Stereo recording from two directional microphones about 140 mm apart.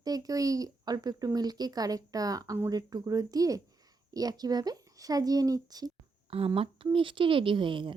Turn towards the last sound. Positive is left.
turn(degrees=-35)  # may be behind; listen again after turning